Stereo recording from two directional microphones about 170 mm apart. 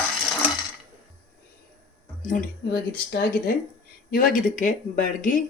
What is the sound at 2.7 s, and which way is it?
Speech, 65° left (ahead or behind).